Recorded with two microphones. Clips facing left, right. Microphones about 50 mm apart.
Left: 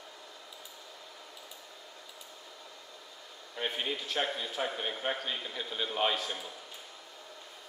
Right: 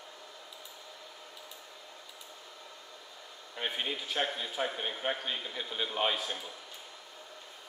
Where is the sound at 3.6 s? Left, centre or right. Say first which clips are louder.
Left 1 dB; centre.